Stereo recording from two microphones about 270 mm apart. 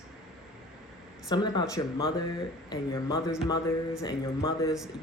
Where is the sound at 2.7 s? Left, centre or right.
Centre.